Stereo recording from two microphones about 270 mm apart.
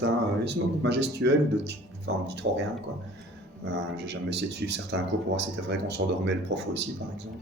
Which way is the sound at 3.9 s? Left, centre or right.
Right.